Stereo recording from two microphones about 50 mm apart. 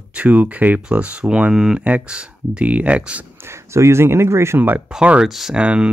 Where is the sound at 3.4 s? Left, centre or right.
Right.